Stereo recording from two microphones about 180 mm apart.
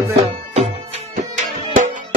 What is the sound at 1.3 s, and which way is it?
Music, 45° right (ahead or behind).